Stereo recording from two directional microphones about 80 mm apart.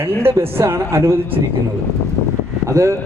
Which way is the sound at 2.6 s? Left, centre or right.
Right.